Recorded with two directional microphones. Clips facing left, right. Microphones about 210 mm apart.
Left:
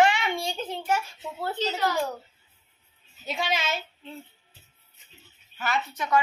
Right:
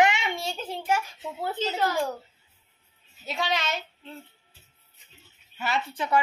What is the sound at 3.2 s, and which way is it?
Speech, centre (ahead or behind).